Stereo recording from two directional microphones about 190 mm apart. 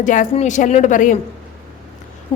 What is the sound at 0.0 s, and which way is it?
A woman's voice, 40° left (ahead or behind).